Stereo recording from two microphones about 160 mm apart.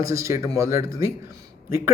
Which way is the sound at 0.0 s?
20° right (ahead or behind).